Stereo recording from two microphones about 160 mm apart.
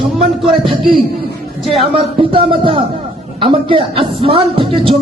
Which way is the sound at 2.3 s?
35° right (ahead or behind).